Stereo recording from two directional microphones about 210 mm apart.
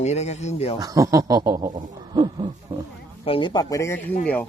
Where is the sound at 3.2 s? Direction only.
25° left (ahead or behind).